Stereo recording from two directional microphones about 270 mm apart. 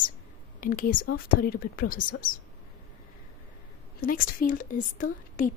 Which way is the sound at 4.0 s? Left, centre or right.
Left.